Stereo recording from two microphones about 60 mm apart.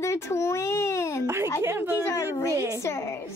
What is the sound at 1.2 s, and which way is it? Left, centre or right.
Speech, right.